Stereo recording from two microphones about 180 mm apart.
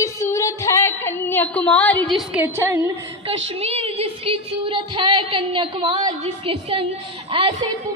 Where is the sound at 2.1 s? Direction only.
5° right (ahead or behind).